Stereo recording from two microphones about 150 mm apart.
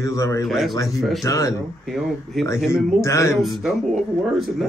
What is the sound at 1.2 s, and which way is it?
Speech, 20° left (ahead or behind).